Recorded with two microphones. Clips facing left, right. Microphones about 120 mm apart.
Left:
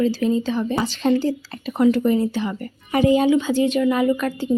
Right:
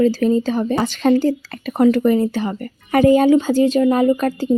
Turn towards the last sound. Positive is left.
turn(degrees=-40)  # may be behind; listen again after turning